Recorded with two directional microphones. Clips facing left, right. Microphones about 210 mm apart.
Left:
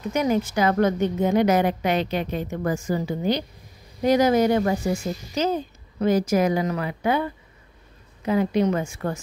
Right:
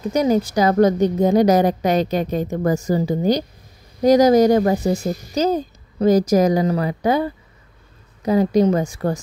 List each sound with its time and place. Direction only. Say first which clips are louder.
0.0 s a woman's voice: right 5 dB; 35° right (ahead or behind)